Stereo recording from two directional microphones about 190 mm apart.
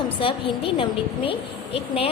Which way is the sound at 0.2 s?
30° left (ahead or behind).